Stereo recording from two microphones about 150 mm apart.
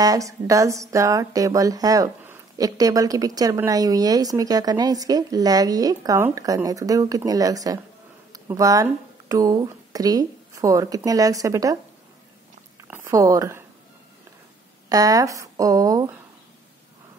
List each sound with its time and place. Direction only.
0.0 s speech: 20° right (ahead or behind)
12.9 s speech: 20° right (ahead or behind)
14.9 s speech: 25° right (ahead or behind)